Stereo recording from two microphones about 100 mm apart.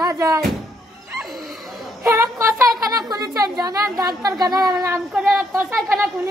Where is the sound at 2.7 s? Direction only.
40° right (ahead or behind).